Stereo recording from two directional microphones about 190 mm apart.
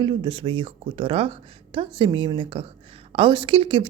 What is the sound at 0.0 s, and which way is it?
Speech, 25° right (ahead or behind).